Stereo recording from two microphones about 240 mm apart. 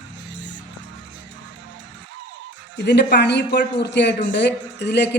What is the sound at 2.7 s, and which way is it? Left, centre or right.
Speech, left.